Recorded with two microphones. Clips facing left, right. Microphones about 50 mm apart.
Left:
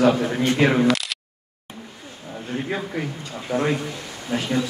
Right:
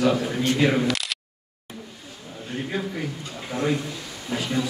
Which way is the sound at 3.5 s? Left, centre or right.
Left.